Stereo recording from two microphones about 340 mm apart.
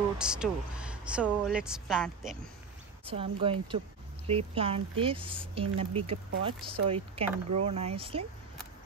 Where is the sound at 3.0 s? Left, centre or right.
Centre.